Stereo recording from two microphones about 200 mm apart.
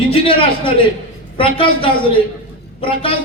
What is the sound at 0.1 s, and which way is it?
Speech, 25° left (ahead or behind).